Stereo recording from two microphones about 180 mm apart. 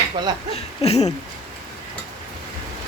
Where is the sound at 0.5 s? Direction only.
35° left (ahead or behind).